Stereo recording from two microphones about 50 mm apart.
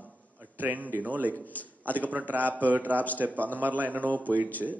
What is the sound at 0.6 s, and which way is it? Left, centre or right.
Speech, right.